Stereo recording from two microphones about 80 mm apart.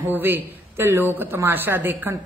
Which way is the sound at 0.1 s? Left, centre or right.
Right.